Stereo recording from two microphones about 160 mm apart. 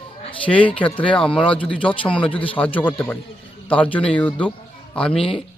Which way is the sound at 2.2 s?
35° left (ahead or behind).